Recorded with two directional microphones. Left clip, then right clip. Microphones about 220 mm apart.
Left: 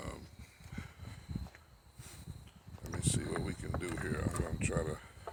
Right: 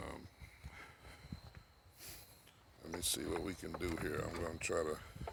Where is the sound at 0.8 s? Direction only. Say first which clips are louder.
Left 4 dB; 35° right (ahead or behind).